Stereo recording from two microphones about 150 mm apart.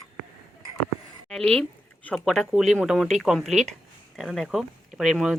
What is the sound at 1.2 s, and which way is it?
Speech, 5° left (ahead or behind).